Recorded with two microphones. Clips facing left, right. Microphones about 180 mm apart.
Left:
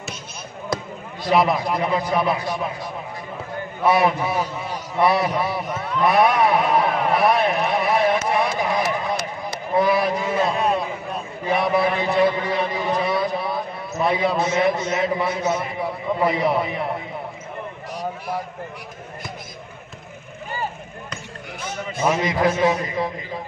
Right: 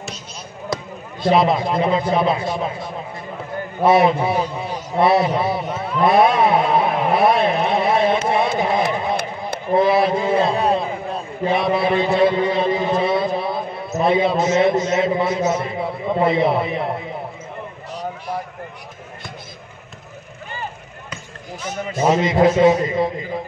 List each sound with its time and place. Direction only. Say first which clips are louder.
1.2 s a man's voice: right 3 dB; 25° right (ahead or behind)
5.0 s a sound: right 3 dB; 25° right (ahead or behind)
9.8 s a man's voice: right 3 dB; 25° right (ahead or behind)
22.1 s a man's voice: right 7 dB; 25° right (ahead or behind)